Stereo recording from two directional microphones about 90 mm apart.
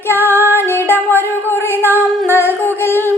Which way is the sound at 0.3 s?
25° left (ahead or behind).